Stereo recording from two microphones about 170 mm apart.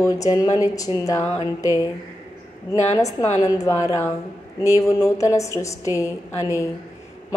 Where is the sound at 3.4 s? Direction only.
20° left (ahead or behind).